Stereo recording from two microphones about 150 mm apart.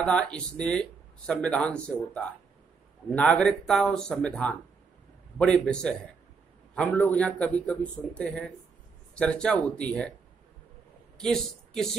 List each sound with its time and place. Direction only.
0.0 s speech: 5° left (ahead or behind)
11.1 s speech: 5° left (ahead or behind)